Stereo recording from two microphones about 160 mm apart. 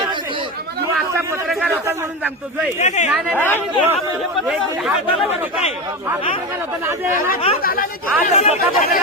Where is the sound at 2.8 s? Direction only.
45° left (ahead or behind).